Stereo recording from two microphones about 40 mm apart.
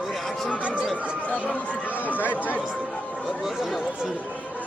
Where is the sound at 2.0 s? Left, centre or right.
Left.